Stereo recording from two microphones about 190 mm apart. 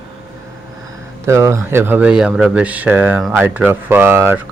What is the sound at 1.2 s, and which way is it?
Speech, 15° right (ahead or behind).